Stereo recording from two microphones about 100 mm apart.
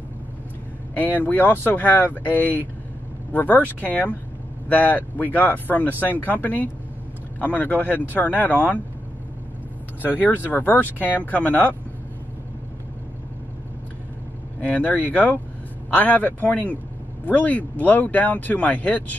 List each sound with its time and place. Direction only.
1.2 s speech: 15° left (ahead or behind)
10.0 s speech: 20° left (ahead or behind)
14.6 s speech: 15° left (ahead or behind)